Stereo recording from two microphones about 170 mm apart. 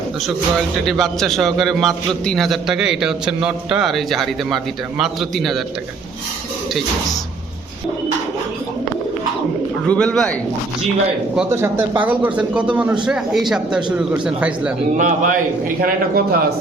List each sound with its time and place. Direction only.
0.9 s a man's voice: centre (ahead or behind)
9.8 s a man's voice: 5° left (ahead or behind)
11.3 s speech: 15° right (ahead or behind)
14.9 s a man's voice: 50° right (ahead or behind)
15.8 s a man's voice: 60° right (ahead or behind)